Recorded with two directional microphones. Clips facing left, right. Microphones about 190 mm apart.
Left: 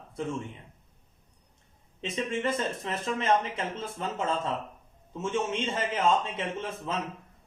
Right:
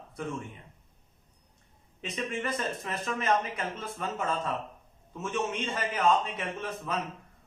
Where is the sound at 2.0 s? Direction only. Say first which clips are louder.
Left 4 dB; 25° left (ahead or behind).